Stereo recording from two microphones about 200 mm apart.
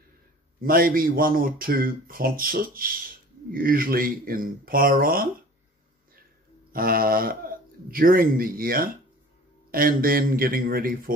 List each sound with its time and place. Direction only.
0.6 s speech: 45° right (ahead or behind)
6.7 s speech: 45° right (ahead or behind)